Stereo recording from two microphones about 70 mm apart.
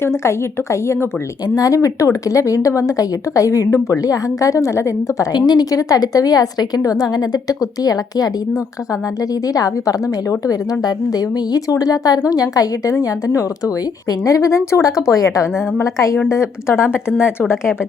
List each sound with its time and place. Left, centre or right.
0.0 s a woman's voice: left
1.5 s speech: left
5.3 s a woman's voice: left